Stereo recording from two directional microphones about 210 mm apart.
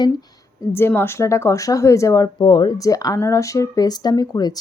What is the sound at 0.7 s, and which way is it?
Speech, 10° left (ahead or behind).